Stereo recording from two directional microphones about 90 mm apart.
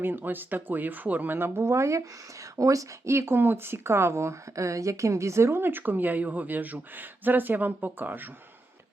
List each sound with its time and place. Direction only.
0.0 s speech: 25° right (ahead or behind)